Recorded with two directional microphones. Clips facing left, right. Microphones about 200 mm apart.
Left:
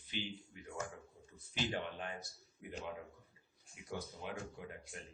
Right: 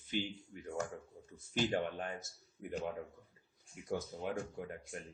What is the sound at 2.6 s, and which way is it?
Speech, 50° right (ahead or behind).